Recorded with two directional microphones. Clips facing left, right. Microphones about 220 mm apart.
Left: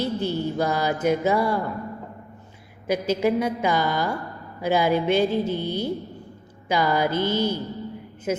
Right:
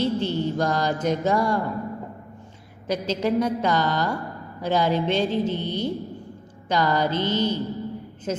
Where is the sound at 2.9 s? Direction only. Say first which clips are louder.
Left 2 dB; 10° left (ahead or behind).